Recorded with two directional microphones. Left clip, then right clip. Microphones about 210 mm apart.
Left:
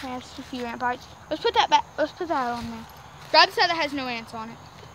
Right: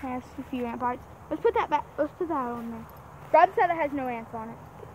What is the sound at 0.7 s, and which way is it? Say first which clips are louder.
Speech: left 6 dB; 25° left (ahead or behind).